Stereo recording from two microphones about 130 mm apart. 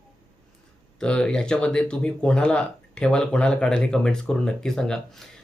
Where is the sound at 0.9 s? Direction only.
5° left (ahead or behind).